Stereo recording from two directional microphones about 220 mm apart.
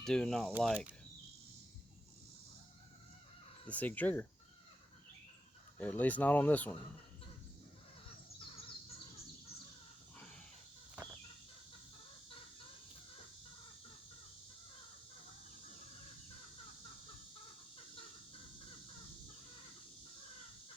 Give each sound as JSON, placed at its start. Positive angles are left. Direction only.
{"t": 0.0, "sound": "speech", "side_deg": 5}
{"t": 3.7, "sound": "speech", "side_deg": 5}
{"t": 5.7, "sound": "speech", "side_deg": 5}